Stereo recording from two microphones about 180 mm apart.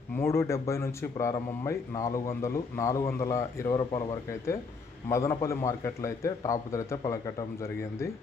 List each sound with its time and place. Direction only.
0.2 s a man's voice: 15° left (ahead or behind)